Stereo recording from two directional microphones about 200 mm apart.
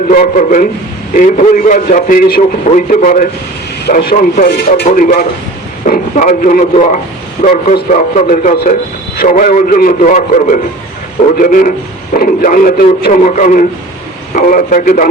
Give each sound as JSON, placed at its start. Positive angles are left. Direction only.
{"t": 0.1, "sound": "a man's voice", "side_deg": 40}